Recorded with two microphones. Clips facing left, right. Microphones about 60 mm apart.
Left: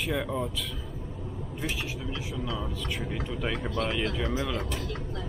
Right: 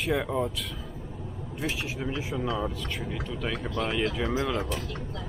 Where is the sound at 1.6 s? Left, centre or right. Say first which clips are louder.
Right 2 dB; centre.